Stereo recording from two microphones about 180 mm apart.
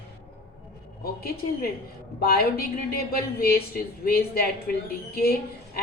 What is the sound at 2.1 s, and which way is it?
A woman's voice, 55° left (ahead or behind).